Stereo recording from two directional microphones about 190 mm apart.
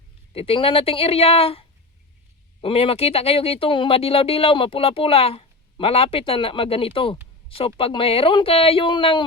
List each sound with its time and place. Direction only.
0.3 s speech: 30° left (ahead or behind)